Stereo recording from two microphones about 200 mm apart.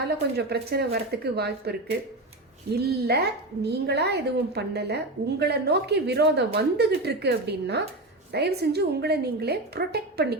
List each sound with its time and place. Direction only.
0.3 s a woman's voice: 55° right (ahead or behind)
2.7 s a woman's voice: 55° right (ahead or behind)